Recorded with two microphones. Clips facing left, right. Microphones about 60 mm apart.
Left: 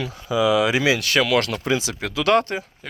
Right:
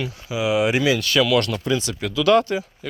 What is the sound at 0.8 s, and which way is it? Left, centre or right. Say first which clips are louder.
Speech: right 1 dB; left.